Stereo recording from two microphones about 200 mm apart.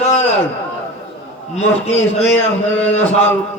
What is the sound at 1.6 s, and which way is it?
Music, 30° left (ahead or behind).